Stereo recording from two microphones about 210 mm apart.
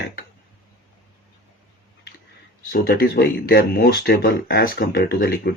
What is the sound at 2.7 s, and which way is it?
Speech, 45° left (ahead or behind).